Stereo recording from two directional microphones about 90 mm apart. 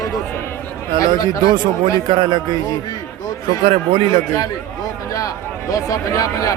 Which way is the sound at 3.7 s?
90° right.